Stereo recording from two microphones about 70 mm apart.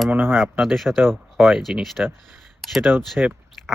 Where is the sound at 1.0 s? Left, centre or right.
Right.